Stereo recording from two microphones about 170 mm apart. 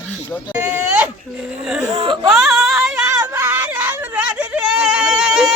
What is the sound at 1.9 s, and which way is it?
Whimper, 30° right (ahead or behind).